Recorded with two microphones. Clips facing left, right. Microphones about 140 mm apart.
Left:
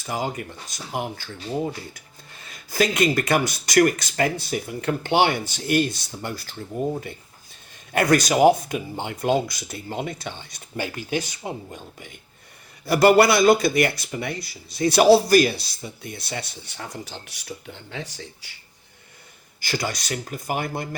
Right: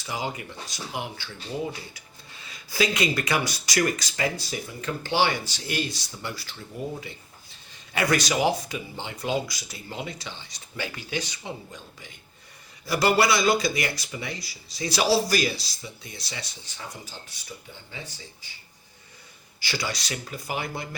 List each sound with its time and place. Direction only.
0.0 s speech: 50° left (ahead or behind)
7.9 s speech: 50° left (ahead or behind); by 18.5 s 75° left (ahead or behind)
19.5 s speech: 50° left (ahead or behind)